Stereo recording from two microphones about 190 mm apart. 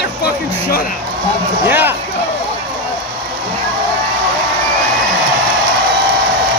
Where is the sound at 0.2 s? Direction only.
50° left (ahead or behind).